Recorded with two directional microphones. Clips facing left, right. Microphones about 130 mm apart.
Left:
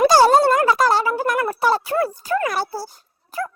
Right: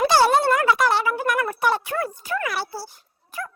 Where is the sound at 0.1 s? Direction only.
40° left (ahead or behind).